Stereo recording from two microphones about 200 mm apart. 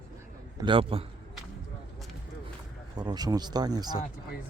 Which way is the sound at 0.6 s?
25° right (ahead or behind).